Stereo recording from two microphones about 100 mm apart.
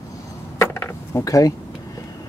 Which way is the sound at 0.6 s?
30° left (ahead or behind).